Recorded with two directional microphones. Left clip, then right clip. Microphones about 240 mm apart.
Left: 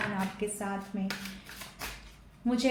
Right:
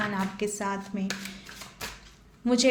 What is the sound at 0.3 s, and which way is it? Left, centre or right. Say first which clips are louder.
Speech: right 5 dB; right.